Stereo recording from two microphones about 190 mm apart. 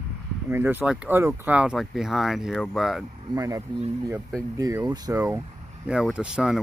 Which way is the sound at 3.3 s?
20° right (ahead or behind).